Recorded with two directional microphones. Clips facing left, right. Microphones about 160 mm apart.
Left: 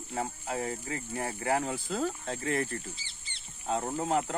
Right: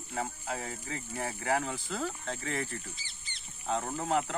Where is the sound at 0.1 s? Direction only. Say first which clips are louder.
Left 2 dB; 15° left (ahead or behind).